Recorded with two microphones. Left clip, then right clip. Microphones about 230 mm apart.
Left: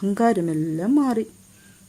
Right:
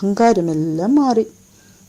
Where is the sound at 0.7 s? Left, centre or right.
Centre.